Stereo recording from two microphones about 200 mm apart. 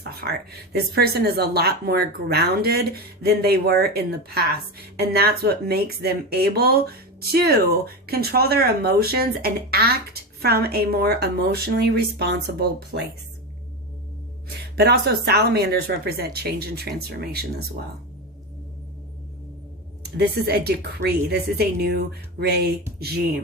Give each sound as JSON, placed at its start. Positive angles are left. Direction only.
{"t": 0.0, "sound": "speech", "side_deg": -55}
{"t": 14.8, "sound": "speech", "side_deg": -50}
{"t": 20.0, "sound": "speech", "side_deg": -55}